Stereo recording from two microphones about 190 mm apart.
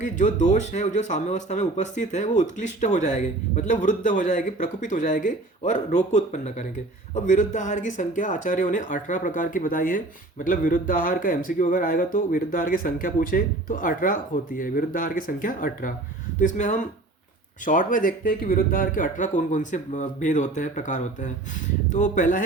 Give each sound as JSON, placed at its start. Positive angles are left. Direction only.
{"t": 0.0, "sound": "speech", "side_deg": 40}